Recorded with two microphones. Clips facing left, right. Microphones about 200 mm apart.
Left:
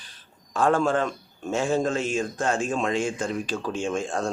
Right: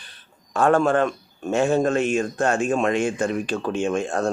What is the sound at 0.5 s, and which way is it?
Speech, 60° right (ahead or behind).